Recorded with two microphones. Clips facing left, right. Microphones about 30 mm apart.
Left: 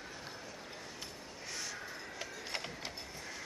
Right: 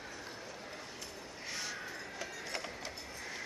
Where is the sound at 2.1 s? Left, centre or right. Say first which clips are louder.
Even; centre.